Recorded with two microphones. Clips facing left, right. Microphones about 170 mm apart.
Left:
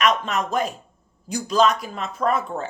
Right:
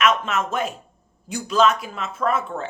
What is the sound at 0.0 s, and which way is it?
Speech, 35° left (ahead or behind).